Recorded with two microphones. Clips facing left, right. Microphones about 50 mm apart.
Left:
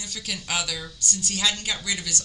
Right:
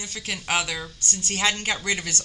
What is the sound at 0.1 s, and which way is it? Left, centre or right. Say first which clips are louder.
Speech: right 4 dB; right.